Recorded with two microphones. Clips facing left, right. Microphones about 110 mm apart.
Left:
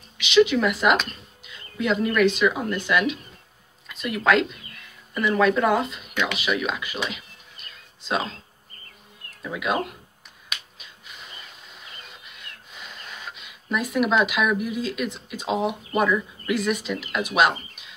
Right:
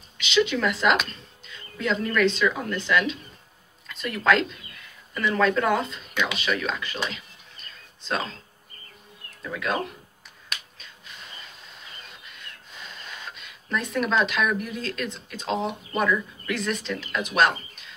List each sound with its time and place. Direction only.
0.2 s speech: 5° left (ahead or behind)
9.4 s speech: 15° left (ahead or behind)
12.3 s speech: 5° left (ahead or behind)